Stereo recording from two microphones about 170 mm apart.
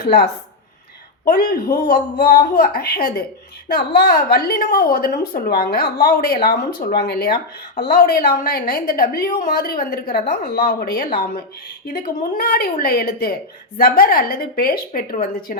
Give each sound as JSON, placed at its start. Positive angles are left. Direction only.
{"t": 0.0, "sound": "speech", "side_deg": 65}
{"t": 1.5, "sound": "a woman's voice", "side_deg": 60}